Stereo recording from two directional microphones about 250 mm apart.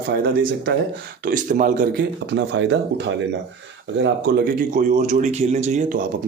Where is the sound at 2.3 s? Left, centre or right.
Right.